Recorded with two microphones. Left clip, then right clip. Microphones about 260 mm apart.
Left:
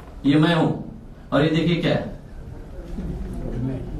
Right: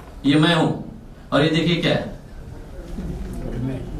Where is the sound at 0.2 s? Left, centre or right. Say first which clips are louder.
Right 1 dB; centre.